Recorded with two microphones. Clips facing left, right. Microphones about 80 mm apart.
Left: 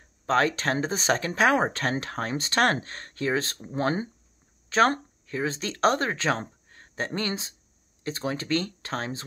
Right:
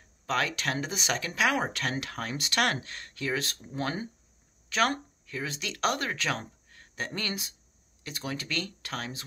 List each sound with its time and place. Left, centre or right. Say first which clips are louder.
0.0 s speech: left 6 dB; left